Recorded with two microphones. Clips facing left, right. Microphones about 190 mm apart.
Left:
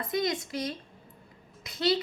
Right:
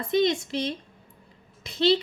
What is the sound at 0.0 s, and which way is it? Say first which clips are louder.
A woman's voice: right 6 dB; 25° right (ahead or behind).